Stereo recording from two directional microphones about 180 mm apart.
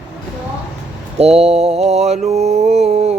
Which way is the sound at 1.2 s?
35° right (ahead or behind).